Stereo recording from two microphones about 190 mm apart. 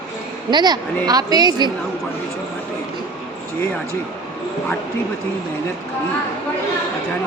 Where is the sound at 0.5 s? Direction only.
20° right (ahead or behind).